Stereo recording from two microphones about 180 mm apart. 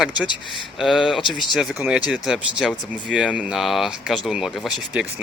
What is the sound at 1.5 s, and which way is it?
Speech, centre (ahead or behind).